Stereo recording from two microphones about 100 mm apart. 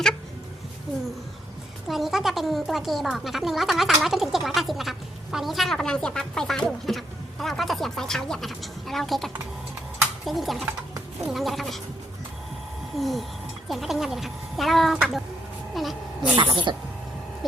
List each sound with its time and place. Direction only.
1.9 s a woman's voice: centre (ahead or behind)
13.0 s a woman's voice: centre (ahead or behind)
15.7 s a sound: centre (ahead or behind)
16.4 s speech: 55° right (ahead or behind)